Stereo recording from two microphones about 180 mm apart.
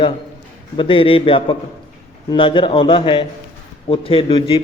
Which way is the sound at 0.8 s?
30° left (ahead or behind).